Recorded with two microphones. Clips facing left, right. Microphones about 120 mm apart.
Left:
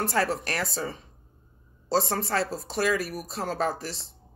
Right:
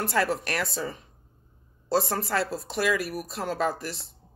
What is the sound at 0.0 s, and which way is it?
Speech, 35° left (ahead or behind).